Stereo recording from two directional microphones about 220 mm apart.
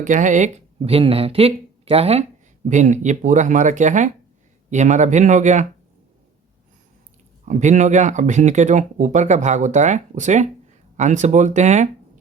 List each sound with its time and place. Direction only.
0.0 s speech: 35° right (ahead or behind)
7.4 s speech: 35° right (ahead or behind)